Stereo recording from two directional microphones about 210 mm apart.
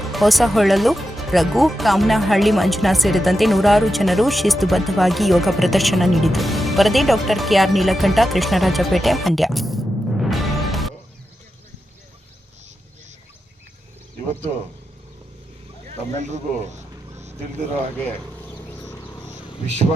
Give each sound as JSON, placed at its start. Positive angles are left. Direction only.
{"t": 0.0, "sound": "speech", "side_deg": 0}
{"t": 15.9, "sound": "a sound", "side_deg": -35}
{"t": 18.7, "sound": "wild animals", "side_deg": 10}